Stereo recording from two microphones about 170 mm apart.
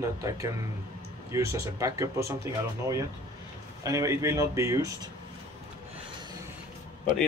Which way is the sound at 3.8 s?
20° right (ahead or behind).